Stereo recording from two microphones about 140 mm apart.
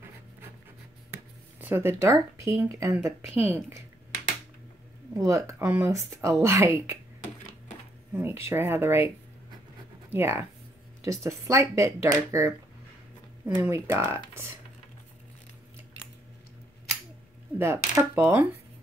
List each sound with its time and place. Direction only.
1.1 s speech: 15° right (ahead or behind)
5.2 s speech: 20° right (ahead or behind)
8.1 s speech: 15° right (ahead or behind)
10.1 s speech: 15° right (ahead or behind)
13.6 s speech: 20° right (ahead or behind)
17.6 s speech: 15° right (ahead or behind)